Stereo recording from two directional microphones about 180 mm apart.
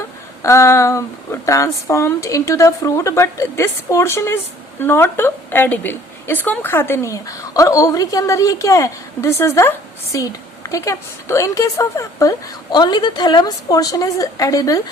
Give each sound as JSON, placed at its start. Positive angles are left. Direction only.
{"t": 0.4, "sound": "a woman's voice", "side_deg": 15}